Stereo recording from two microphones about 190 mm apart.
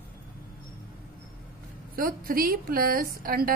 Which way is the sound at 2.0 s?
50° right (ahead or behind).